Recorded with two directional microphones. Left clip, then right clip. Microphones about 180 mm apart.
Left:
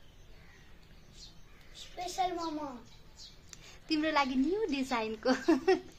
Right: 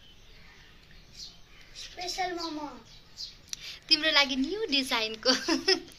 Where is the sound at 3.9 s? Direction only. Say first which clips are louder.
Right 4 dB; 45° left (ahead or behind).